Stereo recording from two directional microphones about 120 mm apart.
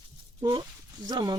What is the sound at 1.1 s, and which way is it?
Speech, 35° right (ahead or behind).